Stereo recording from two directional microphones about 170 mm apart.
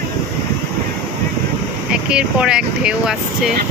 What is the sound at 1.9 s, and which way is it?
Speech, 5° right (ahead or behind).